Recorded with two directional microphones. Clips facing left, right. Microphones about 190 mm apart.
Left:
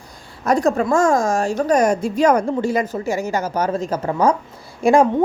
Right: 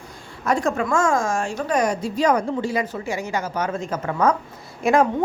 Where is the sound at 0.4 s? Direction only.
40° left (ahead or behind).